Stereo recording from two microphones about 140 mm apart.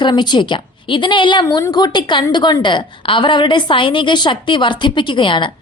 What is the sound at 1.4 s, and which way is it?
A woman's voice, 25° left (ahead or behind).